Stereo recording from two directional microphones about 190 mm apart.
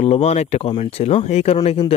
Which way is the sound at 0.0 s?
35° left (ahead or behind).